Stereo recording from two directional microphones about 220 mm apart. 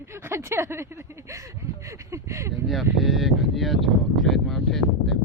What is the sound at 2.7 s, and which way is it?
Speech, centre (ahead or behind).